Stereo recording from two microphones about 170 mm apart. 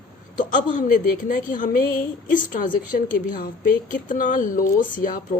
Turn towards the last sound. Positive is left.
turn(degrees=55)  # may be behind; listen again after turning